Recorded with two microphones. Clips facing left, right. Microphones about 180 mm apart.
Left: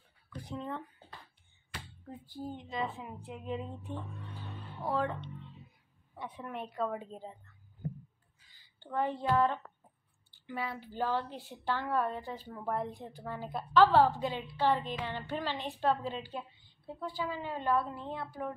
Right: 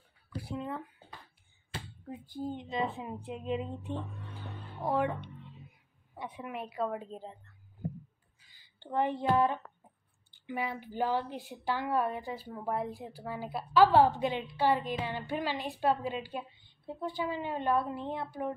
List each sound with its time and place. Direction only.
0.4 s a woman's voice: 5° right (ahead or behind)
1.7 s finger snapping: 30° right (ahead or behind)
2.0 s a woman's voice: 15° right (ahead or behind); by 7.3 s centre (ahead or behind)
8.7 s a woman's voice: 20° right (ahead or behind)